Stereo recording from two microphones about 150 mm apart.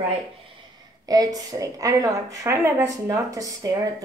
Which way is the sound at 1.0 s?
25° right (ahead or behind).